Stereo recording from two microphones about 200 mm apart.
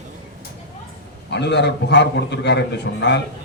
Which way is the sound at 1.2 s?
60° left (ahead or behind).